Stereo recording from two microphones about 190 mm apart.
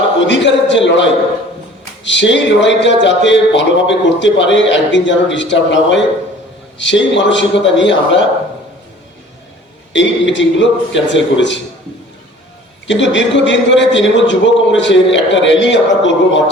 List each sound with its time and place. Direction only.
0.3 s a sound: 70° left (ahead or behind)
2.0 s a man's voice: 70° left (ahead or behind)
9.9 s a man's voice: 75° left (ahead or behind)
12.9 s a man's voice: 70° left (ahead or behind)